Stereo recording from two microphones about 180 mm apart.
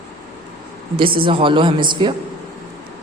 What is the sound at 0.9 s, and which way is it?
A woman's voice, 30° right (ahead or behind).